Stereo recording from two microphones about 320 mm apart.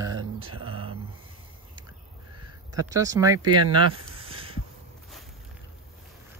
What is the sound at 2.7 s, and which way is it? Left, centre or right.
Speech, centre.